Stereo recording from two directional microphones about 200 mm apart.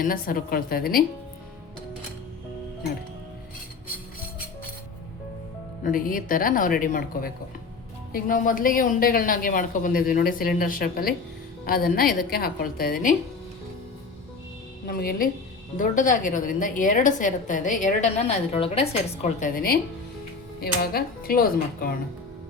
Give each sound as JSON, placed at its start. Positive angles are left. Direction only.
{"t": 0.0, "sound": "speech", "side_deg": 45}
{"t": 5.8, "sound": "speech", "side_deg": 45}
{"t": 14.8, "sound": "a woman's voice", "side_deg": 50}